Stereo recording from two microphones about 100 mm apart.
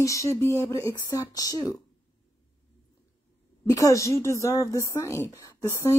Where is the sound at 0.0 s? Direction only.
30° left (ahead or behind).